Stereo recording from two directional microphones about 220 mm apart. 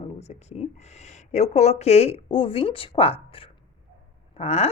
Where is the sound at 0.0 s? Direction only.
30° left (ahead or behind).